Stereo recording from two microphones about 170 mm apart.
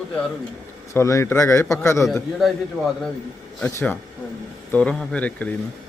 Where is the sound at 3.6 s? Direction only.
10° left (ahead or behind).